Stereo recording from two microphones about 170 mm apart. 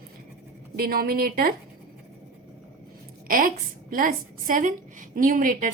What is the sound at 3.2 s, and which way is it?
A woman's voice, 55° right (ahead or behind).